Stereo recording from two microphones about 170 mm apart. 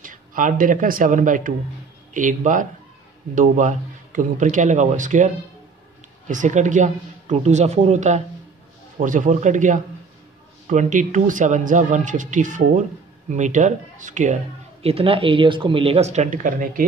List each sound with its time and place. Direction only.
0.0 s speech: 55° right (ahead or behind)